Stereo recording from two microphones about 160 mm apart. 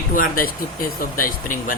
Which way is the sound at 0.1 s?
60° left (ahead or behind).